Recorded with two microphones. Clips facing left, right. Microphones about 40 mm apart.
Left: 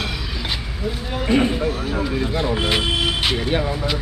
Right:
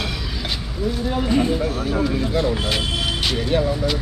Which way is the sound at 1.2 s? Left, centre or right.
Left.